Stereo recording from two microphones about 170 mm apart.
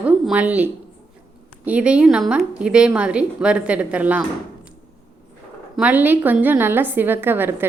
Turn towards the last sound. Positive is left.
turn(degrees=-10)  # may be behind; listen again after turning